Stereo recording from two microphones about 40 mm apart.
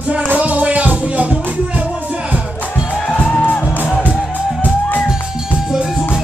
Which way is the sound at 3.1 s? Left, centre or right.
Left.